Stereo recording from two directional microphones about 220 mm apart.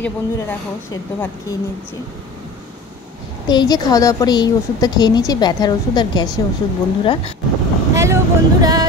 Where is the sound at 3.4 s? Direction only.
20° left (ahead or behind).